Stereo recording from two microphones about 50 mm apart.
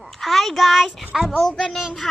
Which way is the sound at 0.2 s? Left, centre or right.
Centre.